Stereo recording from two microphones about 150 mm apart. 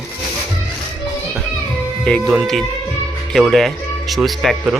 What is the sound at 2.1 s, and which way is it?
A man's voice, centre (ahead or behind).